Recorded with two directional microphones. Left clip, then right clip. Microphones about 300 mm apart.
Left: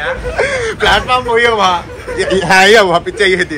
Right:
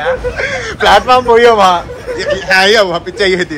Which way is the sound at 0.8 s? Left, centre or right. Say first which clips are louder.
Right 5 dB; centre.